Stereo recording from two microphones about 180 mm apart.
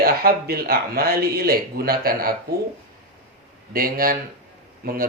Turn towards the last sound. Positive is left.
turn(degrees=-55)  # may be behind; listen again after turning